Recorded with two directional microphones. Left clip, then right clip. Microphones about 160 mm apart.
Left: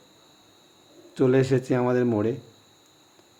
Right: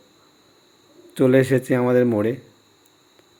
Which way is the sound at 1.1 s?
20° right (ahead or behind).